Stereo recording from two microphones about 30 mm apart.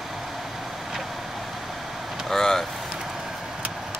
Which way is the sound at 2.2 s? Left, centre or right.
Centre.